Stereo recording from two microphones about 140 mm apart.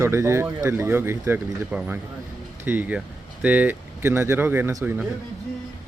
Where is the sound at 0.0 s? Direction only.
20° right (ahead or behind).